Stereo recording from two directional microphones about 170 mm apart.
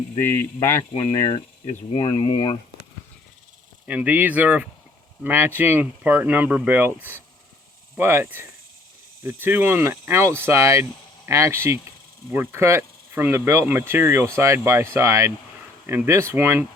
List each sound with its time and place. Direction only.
0.2 s speech: 15° left (ahead or behind)
1.9 s speech: 35° left (ahead or behind)
3.8 s speech: 10° right (ahead or behind)